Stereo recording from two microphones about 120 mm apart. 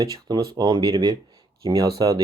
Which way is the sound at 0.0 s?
35° right (ahead or behind).